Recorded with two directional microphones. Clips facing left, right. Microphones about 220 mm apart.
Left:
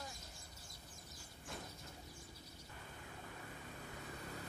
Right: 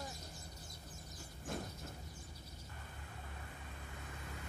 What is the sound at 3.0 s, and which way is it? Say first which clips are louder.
Vehicle: left 2 dB; 45° left (ahead or behind).